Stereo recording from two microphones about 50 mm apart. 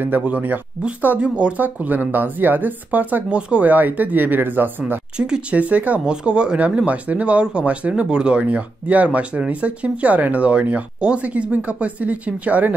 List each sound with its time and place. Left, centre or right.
0.2 s speech: right
1.6 s speech: right
3.3 s speech: right
3.6 s speech: right
5.1 s speech: centre
5.5 s speech: right
5.9 s speech: centre